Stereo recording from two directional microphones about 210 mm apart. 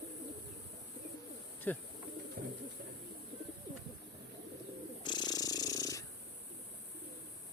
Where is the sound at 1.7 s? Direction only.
10° left (ahead or behind).